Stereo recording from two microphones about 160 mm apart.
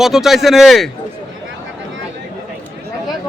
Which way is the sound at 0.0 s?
Centre (ahead or behind).